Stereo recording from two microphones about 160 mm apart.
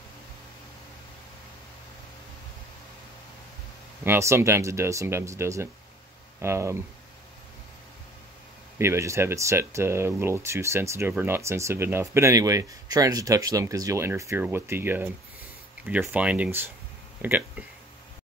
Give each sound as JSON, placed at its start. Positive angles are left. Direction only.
{"t": 4.0, "sound": "speech", "side_deg": -15}
{"t": 8.7, "sound": "speech", "side_deg": -15}